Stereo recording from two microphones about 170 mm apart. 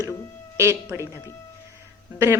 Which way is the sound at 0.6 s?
15° right (ahead or behind).